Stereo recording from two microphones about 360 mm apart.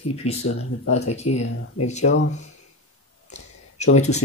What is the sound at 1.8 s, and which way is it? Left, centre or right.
Speech, centre.